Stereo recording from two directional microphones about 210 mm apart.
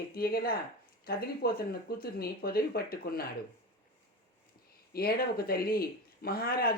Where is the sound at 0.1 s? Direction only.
45° left (ahead or behind).